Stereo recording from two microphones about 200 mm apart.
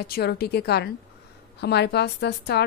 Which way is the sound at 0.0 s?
50° left (ahead or behind).